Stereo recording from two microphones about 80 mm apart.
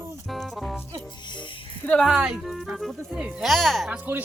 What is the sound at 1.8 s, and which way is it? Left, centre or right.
Speech, left.